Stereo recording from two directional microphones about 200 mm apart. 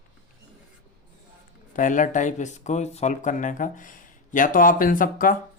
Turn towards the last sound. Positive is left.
turn(degrees=45)  # may be behind; listen again after turning